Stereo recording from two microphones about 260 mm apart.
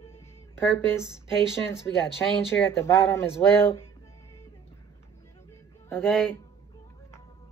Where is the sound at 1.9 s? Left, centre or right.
Centre.